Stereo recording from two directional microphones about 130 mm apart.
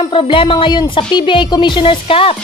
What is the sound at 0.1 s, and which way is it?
Speech, 40° left (ahead or behind).